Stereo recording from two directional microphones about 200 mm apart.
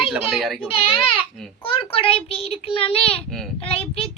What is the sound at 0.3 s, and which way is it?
Speech, centre (ahead or behind).